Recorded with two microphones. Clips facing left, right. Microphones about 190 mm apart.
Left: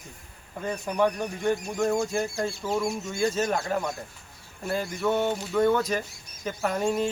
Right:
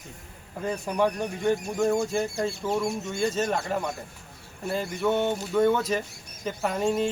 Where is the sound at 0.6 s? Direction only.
Centre (ahead or behind).